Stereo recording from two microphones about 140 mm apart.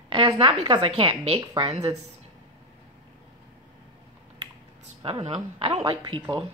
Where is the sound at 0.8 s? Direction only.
45° right (ahead or behind).